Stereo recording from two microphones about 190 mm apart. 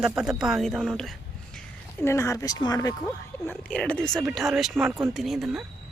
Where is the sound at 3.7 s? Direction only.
5° left (ahead or behind).